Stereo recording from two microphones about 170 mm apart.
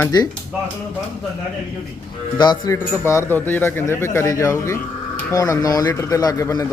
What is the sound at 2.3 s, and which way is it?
A man's voice, 25° left (ahead or behind).